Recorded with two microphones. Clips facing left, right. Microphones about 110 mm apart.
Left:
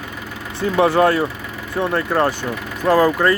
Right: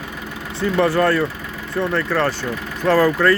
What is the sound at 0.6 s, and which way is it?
Speech, 15° left (ahead or behind).